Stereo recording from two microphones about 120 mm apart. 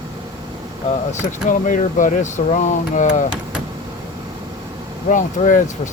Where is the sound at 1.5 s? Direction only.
90° left.